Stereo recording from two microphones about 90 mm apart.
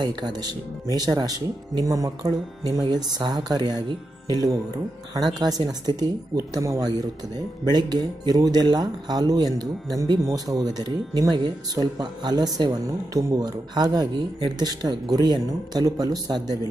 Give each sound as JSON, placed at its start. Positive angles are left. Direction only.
{"t": 0.0, "sound": "speech", "side_deg": -50}